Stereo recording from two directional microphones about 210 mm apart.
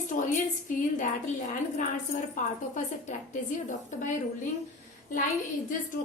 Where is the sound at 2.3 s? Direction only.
35° left (ahead or behind).